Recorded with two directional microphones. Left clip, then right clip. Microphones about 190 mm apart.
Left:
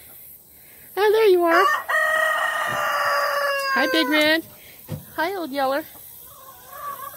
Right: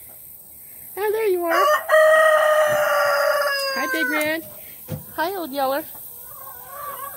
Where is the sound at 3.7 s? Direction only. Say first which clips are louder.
Left 3 dB; 55° left (ahead or behind).